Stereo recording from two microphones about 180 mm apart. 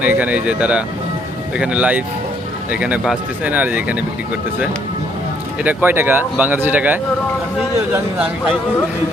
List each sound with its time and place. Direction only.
0.0 s speech: 10° right (ahead or behind)
5.6 s speech: 10° right (ahead or behind)